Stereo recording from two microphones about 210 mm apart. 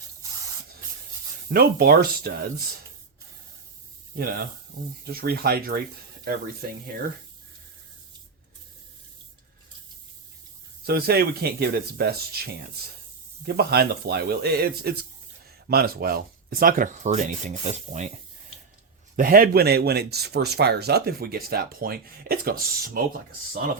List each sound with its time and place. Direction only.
1.5 s speech: 45° right (ahead or behind)
5.0 s speech: 45° right (ahead or behind)
10.8 s speech: 50° right (ahead or behind)
13.5 s speech: 50° right (ahead or behind); by 18.1 s 35° right (ahead or behind)
19.1 s speech: 45° right (ahead or behind)